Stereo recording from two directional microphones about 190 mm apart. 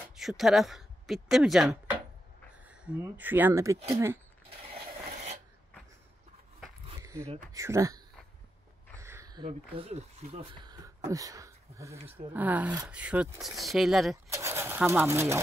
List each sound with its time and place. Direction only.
0.1 s speech: centre (ahead or behind)
4.7 s filing: 35° right (ahead or behind)
7.0 s a sound: 15° right (ahead or behind)
7.5 s speech: 15° right (ahead or behind)
8.9 s a sound: 15° right (ahead or behind)
9.5 s speech: 35° right (ahead or behind); by 14.1 s centre (ahead or behind)
14.1 s speech: 15° right (ahead or behind)